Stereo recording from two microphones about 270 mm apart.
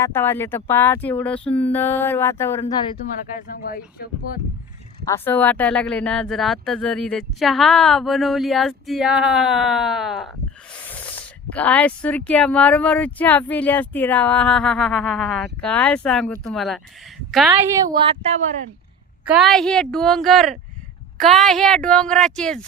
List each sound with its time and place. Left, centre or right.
0.0 s speech: centre
3.5 s speech: left
5.0 s speech: centre
18.0 s speech: right
19.2 s speech: centre